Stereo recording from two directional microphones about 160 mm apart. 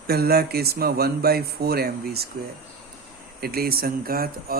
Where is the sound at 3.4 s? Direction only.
70° right (ahead or behind).